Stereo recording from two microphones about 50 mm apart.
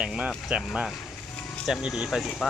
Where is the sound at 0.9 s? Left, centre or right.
Centre.